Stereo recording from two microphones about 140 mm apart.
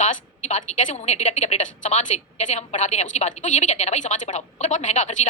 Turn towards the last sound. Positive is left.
turn(degrees=60)  # may be behind; listen again after turning